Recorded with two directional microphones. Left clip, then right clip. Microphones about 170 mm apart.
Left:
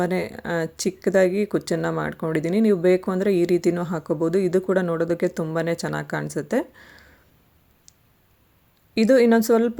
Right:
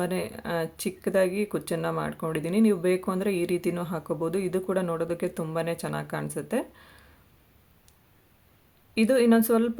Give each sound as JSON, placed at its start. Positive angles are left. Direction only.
{"t": 0.0, "sound": "speech", "side_deg": 25}
{"t": 9.0, "sound": "speech", "side_deg": 25}